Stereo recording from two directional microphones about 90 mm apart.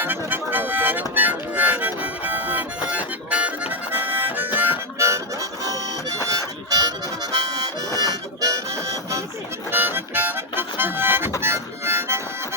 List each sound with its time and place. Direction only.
0.0 s harmonica: 20° right (ahead or behind)
4.9 s harmonica: 30° right (ahead or behind)
9.7 s harmonica: 20° right (ahead or behind)